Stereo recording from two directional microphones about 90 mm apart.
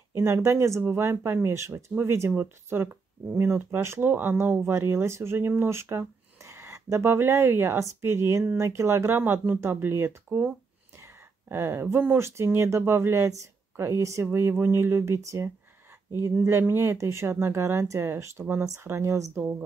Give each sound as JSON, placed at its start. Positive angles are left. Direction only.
{"t": 0.1, "sound": "speech", "side_deg": -30}